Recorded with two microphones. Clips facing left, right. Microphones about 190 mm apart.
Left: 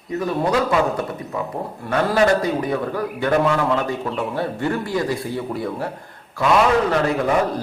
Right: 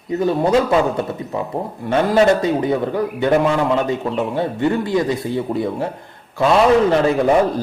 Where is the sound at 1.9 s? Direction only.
25° right (ahead or behind).